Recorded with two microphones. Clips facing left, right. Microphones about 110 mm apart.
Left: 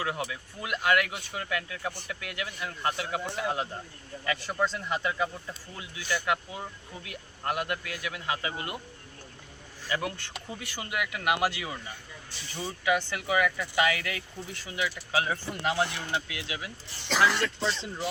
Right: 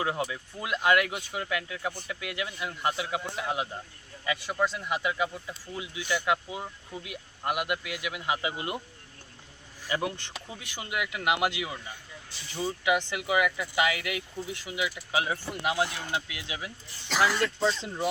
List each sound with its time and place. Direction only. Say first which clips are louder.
0.0 s speech: right 2 dB; 25° right (ahead or behind)
9.8 s speech: right 1 dB; 20° right (ahead or behind)
17.1 s speech: even; 5° right (ahead or behind)